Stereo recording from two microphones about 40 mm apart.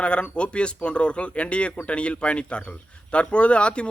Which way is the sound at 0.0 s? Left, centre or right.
Left.